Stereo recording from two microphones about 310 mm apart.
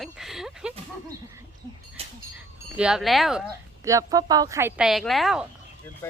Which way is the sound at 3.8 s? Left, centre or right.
Centre.